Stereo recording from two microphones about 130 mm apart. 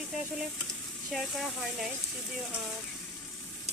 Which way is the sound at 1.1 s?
Centre (ahead or behind).